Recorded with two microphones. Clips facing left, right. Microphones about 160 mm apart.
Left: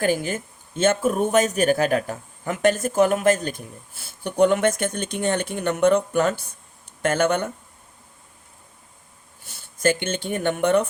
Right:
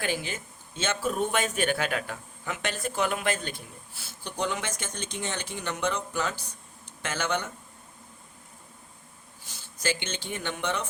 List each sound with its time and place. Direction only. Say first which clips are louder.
0.0 s speech: left 9 dB; 45° left (ahead or behind)
9.7 s speech: left 9 dB; 50° left (ahead or behind)